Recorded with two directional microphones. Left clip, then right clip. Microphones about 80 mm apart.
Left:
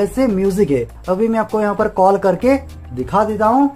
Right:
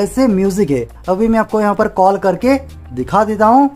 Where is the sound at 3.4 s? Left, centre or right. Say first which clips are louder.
Right 5 dB; right.